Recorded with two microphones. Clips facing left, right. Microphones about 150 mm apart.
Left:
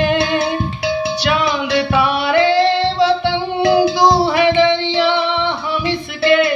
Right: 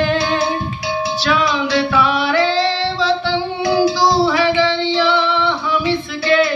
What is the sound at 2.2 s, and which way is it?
Singing, 60° left (ahead or behind).